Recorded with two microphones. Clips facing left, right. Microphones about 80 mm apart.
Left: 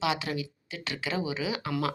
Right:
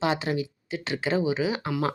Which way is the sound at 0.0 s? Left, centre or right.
Right.